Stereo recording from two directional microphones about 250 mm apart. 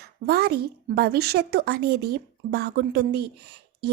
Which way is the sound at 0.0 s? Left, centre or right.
Right.